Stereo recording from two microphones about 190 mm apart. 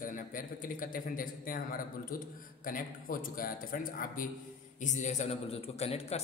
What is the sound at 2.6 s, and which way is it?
A man's voice, 45° left (ahead or behind).